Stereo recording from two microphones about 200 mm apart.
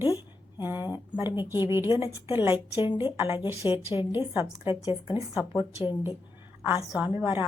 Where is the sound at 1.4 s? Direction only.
20° left (ahead or behind).